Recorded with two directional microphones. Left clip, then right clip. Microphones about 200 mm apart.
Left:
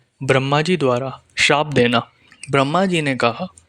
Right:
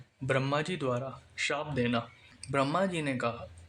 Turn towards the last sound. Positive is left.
turn(degrees=50)  # may be behind; listen again after turning